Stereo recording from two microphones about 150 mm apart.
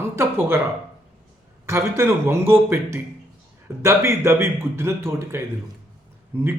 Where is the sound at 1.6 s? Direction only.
15° right (ahead or behind).